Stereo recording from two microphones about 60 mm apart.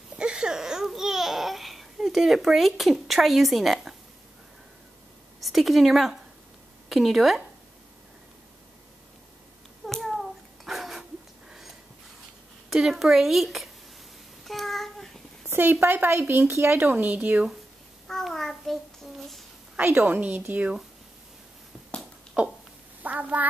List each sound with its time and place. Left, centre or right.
0.2 s babbling: centre
5.4 s speech: centre
9.8 s hands: centre
12.6 s speech: centre
14.4 s child singing: centre
15.5 s a woman's voice: right
18.0 s child singing: centre
19.8 s a woman's voice: right
23.0 s a woman's voice: right